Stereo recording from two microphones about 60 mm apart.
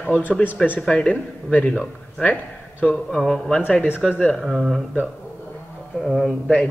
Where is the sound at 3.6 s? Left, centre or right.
Left.